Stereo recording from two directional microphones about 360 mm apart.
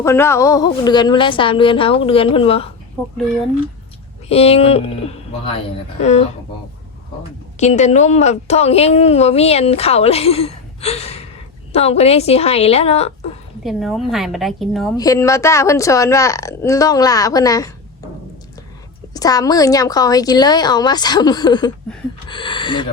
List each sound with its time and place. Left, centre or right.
0.0 s a woman's voice: centre
4.3 s a woman's voice: centre
7.5 s a woman's voice: centre
13.7 s a woman's voice: centre
19.1 s a woman's voice: centre